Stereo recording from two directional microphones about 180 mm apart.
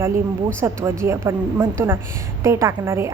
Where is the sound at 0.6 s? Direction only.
15° right (ahead or behind).